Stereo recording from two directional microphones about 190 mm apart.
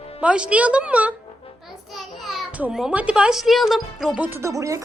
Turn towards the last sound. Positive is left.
turn(degrees=-15)  # may be behind; listen again after turning